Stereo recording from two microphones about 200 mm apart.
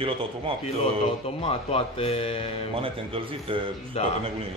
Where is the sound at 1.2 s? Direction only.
30° left (ahead or behind).